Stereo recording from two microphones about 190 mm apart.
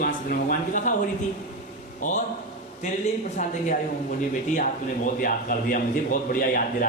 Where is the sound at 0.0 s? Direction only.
50° left (ahead or behind).